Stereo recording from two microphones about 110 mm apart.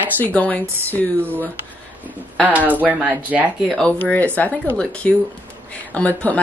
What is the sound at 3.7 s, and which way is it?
Speech, 5° left (ahead or behind).